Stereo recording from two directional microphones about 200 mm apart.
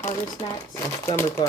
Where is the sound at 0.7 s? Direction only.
15° left (ahead or behind).